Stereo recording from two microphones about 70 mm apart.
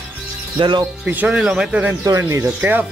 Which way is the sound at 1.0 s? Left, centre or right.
Right.